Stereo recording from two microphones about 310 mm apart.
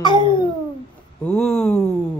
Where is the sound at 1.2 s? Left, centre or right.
Centre.